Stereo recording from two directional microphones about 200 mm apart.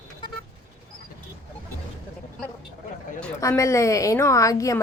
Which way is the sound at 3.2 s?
15° left (ahead or behind).